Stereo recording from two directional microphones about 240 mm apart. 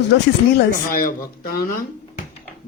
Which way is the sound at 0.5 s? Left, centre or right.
Left.